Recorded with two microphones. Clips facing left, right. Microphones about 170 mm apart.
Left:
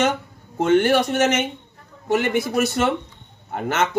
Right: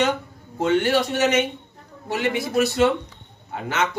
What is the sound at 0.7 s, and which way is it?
Speech, 50° left (ahead or behind).